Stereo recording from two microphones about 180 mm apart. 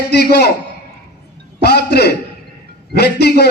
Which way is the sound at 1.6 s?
65° left (ahead or behind).